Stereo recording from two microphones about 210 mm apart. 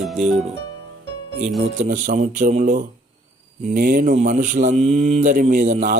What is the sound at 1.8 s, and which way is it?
Speech, 35° right (ahead or behind).